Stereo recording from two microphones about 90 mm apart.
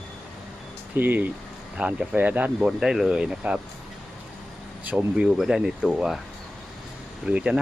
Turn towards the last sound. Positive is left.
turn(degrees=-10)  # may be behind; listen again after turning